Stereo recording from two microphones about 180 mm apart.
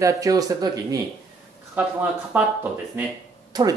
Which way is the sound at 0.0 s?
20° right (ahead or behind).